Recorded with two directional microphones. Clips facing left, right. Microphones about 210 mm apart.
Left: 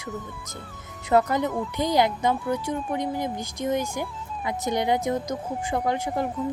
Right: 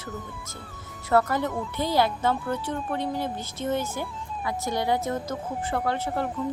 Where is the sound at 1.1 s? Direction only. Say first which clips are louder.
Left 2 dB; 15° left (ahead or behind).